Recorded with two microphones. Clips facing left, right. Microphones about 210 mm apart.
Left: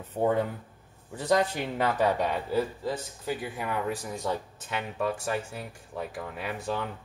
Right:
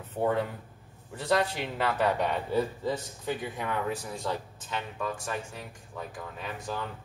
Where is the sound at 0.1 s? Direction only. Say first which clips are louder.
Left 2 dB; 10° left (ahead or behind).